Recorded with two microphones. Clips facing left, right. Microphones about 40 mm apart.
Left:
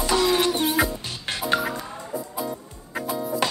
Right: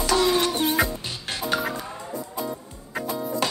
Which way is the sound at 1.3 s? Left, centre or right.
Left.